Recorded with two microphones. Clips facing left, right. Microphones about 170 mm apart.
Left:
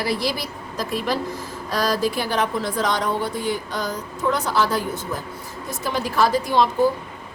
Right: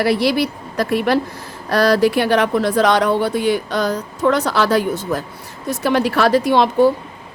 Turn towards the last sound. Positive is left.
turn(degrees=-70)  # may be behind; listen again after turning